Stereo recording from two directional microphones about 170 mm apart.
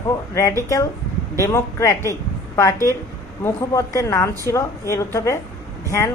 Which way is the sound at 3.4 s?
15° left (ahead or behind).